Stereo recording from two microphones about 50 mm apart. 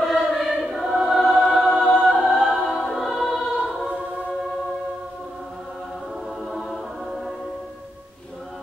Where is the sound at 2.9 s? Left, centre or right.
Centre.